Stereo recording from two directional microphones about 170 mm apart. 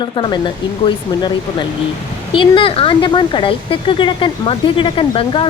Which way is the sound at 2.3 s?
30° left (ahead or behind).